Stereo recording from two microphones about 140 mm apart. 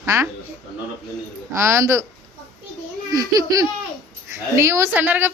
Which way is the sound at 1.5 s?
20° right (ahead or behind).